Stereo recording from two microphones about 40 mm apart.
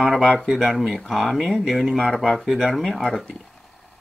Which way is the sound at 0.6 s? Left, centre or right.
Centre.